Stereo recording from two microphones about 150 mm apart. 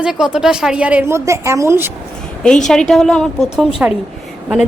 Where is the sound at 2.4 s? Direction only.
5° left (ahead or behind).